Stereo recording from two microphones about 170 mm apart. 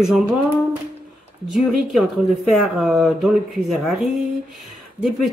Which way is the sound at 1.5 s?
Centre (ahead or behind).